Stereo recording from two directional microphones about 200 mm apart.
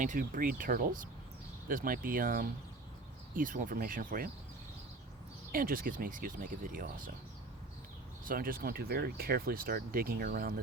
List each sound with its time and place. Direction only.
0.0 s speech: 45° right (ahead or behind)
5.5 s speech: 45° right (ahead or behind)
8.2 s speech: 45° right (ahead or behind)